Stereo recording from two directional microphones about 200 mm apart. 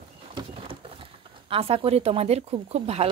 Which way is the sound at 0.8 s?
25° right (ahead or behind).